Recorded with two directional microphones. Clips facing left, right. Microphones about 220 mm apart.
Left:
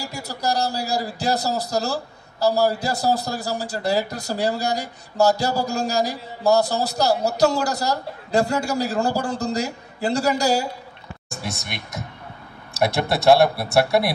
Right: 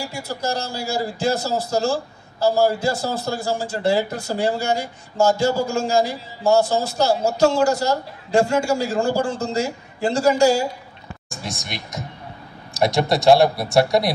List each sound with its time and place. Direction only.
0.0 s a man's voice: 40° left (ahead or behind)
11.5 s speech: 60° left (ahead or behind)